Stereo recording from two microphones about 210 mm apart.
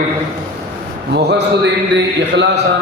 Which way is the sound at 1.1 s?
55° right (ahead or behind).